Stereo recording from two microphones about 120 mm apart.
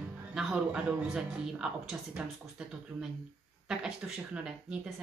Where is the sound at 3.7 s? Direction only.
5° right (ahead or behind).